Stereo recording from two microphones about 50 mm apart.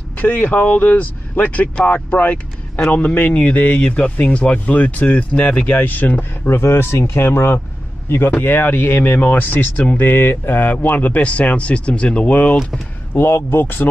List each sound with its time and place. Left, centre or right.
0.2 s speech: left
2.1 s vehicle: left
3.2 s speech: left
5.8 s speech: left
6.5 s speech: left
7.2 s speech: left
10.7 s speech: left
13.1 s speech: left